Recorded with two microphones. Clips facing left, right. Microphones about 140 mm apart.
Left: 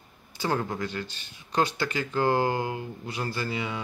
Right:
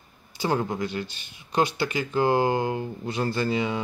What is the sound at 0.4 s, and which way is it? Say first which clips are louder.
Speech: right 3 dB; 15° right (ahead or behind).